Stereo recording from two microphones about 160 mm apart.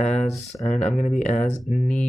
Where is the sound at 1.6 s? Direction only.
Centre (ahead or behind).